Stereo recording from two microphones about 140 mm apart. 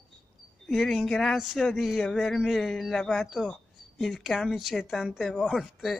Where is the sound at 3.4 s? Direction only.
10° left (ahead or behind).